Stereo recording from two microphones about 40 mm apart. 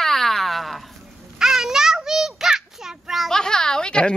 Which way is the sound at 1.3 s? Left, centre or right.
Centre.